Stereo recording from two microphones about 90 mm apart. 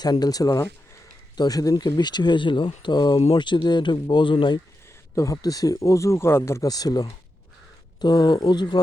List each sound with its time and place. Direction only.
0.0 s speech: 45° left (ahead or behind)
5.1 s speech: 35° left (ahead or behind)
6.7 s speech: 45° left (ahead or behind)